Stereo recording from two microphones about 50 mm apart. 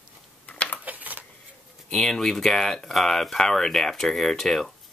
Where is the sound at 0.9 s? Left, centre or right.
Right.